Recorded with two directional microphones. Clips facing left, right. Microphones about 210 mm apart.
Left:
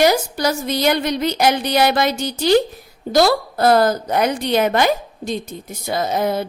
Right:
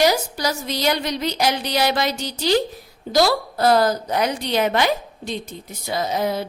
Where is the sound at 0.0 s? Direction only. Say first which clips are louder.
Left 3 dB; 55° left (ahead or behind).